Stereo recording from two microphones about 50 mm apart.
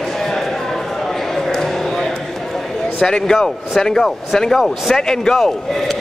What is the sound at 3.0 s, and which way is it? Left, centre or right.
Speech, centre.